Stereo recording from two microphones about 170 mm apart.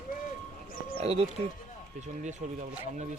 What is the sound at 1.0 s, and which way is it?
Speech, 35° right (ahead or behind).